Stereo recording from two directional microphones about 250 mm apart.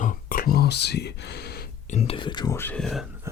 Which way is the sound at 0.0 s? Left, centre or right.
Left.